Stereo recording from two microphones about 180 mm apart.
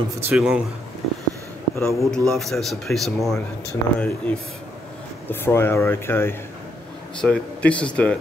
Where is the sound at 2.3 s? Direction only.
Centre (ahead or behind).